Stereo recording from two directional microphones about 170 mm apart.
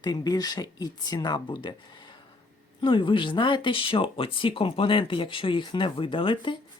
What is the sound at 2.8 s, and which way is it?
Speech, 30° left (ahead or behind).